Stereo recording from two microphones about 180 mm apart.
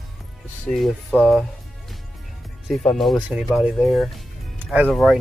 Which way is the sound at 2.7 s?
Centre (ahead or behind).